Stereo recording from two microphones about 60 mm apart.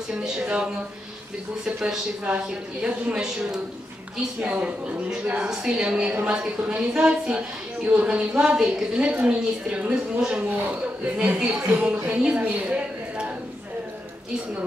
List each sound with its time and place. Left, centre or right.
0.1 s a woman's voice: centre
5.5 s a woman's voice: centre
9.0 s a woman's voice: right
11.6 s a woman's voice: right
12.4 s a sound: right